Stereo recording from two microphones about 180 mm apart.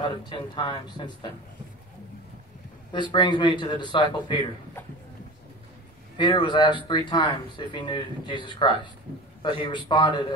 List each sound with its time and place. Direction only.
0.0 s speech: 25° left (ahead or behind)
2.9 s speech: 25° left (ahead or behind)
6.1 s speech: 25° left (ahead or behind)